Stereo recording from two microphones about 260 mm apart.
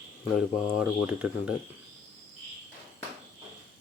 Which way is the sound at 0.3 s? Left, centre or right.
Centre.